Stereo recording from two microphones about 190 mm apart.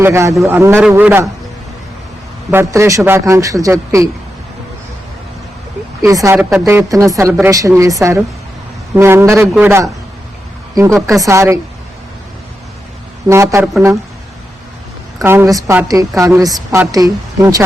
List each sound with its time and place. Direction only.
0.0 s a woman's voice: 15° right (ahead or behind)
2.5 s a woman's voice: 15° right (ahead or behind)
6.0 s a woman's voice: 15° right (ahead or behind)
11.2 s a woman's voice: 15° right (ahead or behind)
13.2 s a woman's voice: 15° right (ahead or behind)
15.2 s a woman's voice: 10° right (ahead or behind)